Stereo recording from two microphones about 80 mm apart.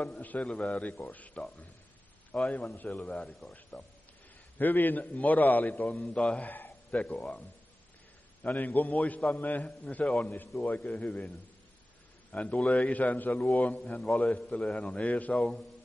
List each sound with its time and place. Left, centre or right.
0.0 s a man's voice: left
2.6 s a man's voice: left
3.2 s a man's voice: centre
4.6 s a man's voice: left